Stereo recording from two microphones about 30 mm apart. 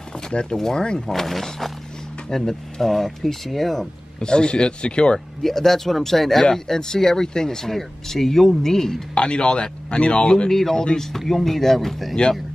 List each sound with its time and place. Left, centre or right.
0.3 s speech: left
0.6 s speech: centre
4.2 s speech: left
5.4 s speech: centre
9.1 s speech: left
10.5 s speech: centre